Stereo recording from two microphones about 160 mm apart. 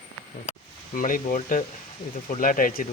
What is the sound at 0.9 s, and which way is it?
Speech, 60° left (ahead or behind).